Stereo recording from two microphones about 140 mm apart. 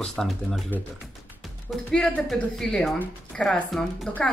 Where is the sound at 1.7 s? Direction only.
5° left (ahead or behind).